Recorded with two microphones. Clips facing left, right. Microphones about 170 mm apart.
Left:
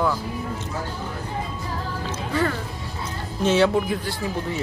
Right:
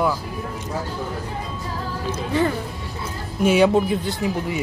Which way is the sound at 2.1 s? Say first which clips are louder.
Right 3 dB; 20° right (ahead or behind).